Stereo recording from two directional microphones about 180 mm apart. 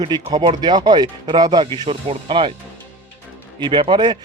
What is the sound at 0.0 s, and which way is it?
A man's voice, 25° right (ahead or behind).